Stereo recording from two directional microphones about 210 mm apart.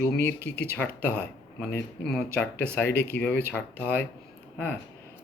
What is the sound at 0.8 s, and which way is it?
Speech, 5° left (ahead or behind).